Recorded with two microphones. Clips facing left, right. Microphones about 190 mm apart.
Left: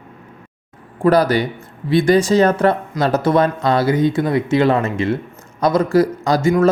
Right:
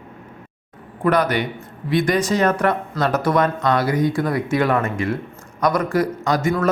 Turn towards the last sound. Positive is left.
turn(degrees=25)  # may be behind; listen again after turning